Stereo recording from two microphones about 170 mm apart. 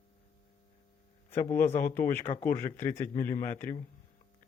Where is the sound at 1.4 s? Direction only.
15° left (ahead or behind).